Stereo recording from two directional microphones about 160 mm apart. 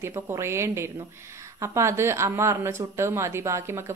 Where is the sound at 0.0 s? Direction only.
15° right (ahead or behind).